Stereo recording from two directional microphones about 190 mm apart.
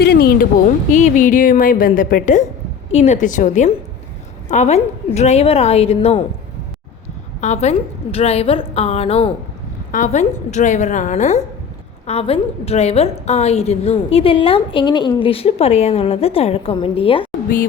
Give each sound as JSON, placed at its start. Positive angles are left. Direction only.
{"t": 0.0, "sound": "a sound", "side_deg": 55}
{"t": 0.9, "sound": "a woman's voice", "side_deg": 40}
{"t": 7.4, "sound": "a woman's voice", "side_deg": 35}